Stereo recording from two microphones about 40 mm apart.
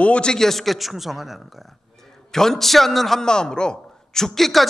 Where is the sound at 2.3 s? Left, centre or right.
Centre.